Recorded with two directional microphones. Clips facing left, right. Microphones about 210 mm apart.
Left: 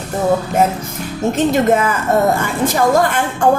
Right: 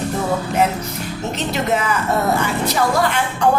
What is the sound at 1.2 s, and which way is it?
A woman's voice, 50° left (ahead or behind).